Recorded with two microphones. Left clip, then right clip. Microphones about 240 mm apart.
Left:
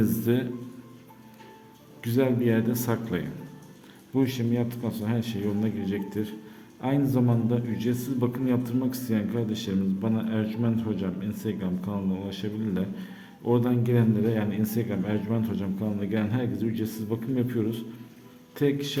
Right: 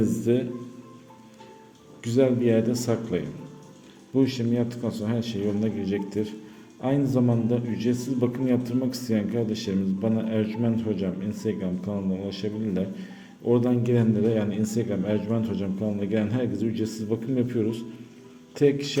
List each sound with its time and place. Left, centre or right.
0.2 s speech: centre
2.0 s a man's voice: centre